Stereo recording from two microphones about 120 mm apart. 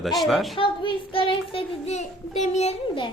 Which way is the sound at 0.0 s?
Centre (ahead or behind).